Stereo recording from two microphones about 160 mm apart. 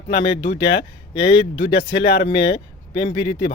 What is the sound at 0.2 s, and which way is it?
Speech, 30° left (ahead or behind).